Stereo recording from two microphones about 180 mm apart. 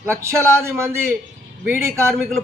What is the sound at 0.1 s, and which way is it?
Speech, 15° right (ahead or behind).